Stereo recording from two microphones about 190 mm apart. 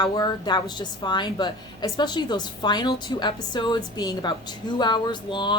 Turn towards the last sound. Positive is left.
turn(degrees=25)  # may be behind; listen again after turning